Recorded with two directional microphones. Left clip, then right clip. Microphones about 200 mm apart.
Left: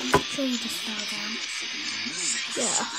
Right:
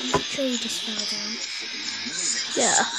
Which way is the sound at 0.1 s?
20° left (ahead or behind).